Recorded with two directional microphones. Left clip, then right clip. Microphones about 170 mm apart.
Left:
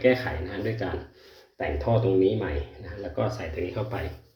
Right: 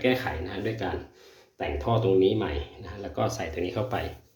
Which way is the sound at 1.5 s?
15° right (ahead or behind).